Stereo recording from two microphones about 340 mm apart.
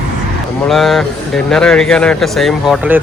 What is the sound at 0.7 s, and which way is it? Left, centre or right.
Speech, centre.